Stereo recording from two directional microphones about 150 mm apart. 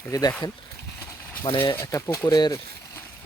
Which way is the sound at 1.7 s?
20° left (ahead or behind).